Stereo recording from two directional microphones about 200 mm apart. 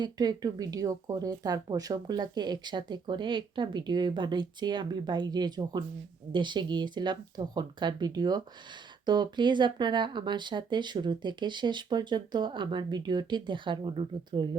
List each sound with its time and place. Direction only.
0.0 s speech: 20° right (ahead or behind)